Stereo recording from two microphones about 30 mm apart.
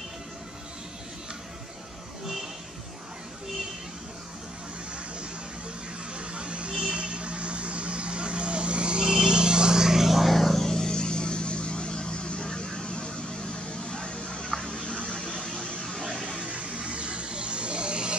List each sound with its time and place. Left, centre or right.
6.1 s vehicle: right; by 10.3 s centre
10.3 s vehicle: centre; by 13.1 s left
13.7 s a sound: left
16.3 s music: right